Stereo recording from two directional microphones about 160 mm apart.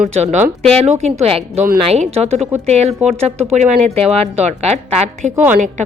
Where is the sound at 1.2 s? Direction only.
40° right (ahead or behind).